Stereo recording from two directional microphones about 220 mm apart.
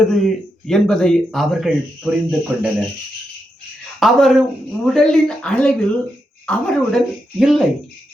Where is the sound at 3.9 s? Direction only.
Centre (ahead or behind).